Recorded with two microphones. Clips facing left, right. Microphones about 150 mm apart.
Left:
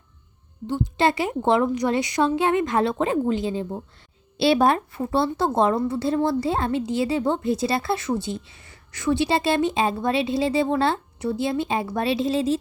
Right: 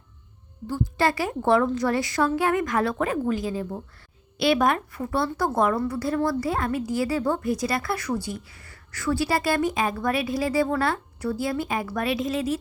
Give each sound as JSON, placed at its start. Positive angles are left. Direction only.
{"t": 0.7, "sound": "a woman's voice", "side_deg": 20}